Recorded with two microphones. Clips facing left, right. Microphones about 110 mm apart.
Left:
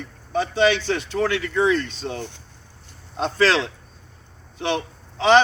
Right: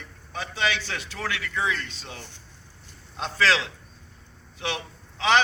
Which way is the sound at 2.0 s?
45° left (ahead or behind).